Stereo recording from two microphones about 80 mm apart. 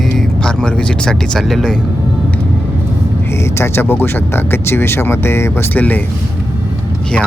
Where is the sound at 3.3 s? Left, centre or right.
Left.